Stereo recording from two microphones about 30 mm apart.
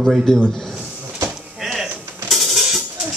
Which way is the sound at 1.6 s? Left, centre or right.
Centre.